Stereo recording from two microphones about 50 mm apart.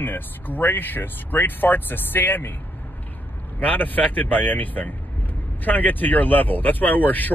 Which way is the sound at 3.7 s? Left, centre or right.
Left.